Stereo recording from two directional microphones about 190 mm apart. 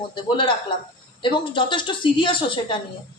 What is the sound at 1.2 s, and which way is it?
A woman's voice, 25° left (ahead or behind).